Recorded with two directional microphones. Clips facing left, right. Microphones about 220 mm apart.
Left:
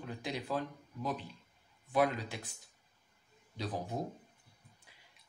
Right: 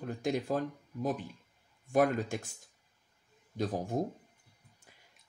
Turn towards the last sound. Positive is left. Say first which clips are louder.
# right 3 dB
turn(degrees=-45)  # may be behind; listen again after turning